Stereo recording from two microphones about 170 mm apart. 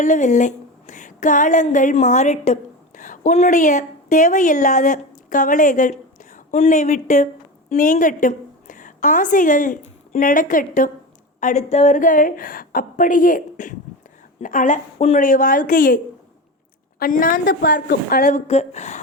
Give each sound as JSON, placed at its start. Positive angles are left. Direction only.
{"t": 0.0, "sound": "a woman's voice", "side_deg": 45}
{"t": 17.0, "sound": "a woman's voice", "side_deg": 55}
{"t": 17.4, "sound": "a woman's voice", "side_deg": 70}